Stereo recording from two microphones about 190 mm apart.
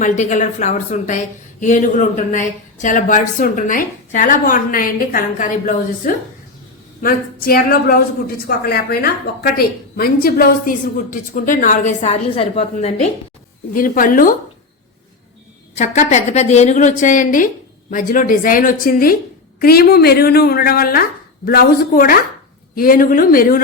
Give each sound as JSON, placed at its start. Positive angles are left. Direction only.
{"t": 0.0, "sound": "a woman's voice", "side_deg": 40}
{"t": 7.0, "sound": "a woman's voice", "side_deg": 50}
{"t": 13.7, "sound": "a woman's voice", "side_deg": 50}
{"t": 15.7, "sound": "a woman's voice", "side_deg": 40}